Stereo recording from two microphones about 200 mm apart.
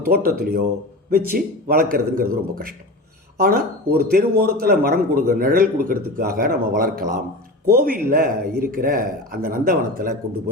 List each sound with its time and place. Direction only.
0.0 s a man's voice: 50° right (ahead or behind)